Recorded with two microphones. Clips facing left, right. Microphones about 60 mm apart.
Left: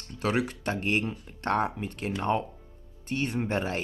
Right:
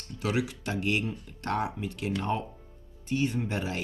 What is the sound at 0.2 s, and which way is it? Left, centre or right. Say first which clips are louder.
Speech: left 2 dB; left.